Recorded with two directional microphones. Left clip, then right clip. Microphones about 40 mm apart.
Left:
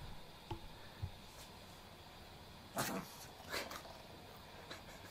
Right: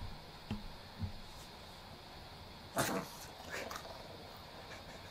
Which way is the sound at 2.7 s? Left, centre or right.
Centre.